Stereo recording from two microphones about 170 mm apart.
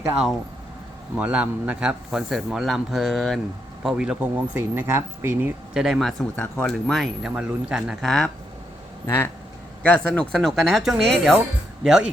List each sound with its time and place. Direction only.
1.1 s speech: 5° right (ahead or behind)
9.0 s speech: 15° left (ahead or behind); by 12.0 s centre (ahead or behind)